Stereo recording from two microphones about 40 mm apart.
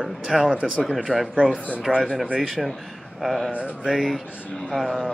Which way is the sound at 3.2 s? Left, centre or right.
Centre.